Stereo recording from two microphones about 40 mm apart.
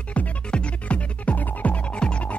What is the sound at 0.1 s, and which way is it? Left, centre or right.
Music, left.